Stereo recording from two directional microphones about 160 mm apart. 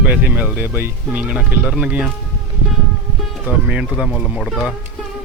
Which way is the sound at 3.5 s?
10° right (ahead or behind).